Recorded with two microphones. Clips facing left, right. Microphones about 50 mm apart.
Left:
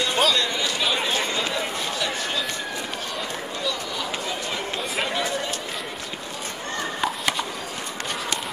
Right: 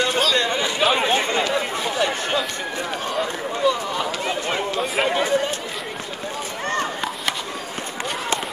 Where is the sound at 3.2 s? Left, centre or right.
Right.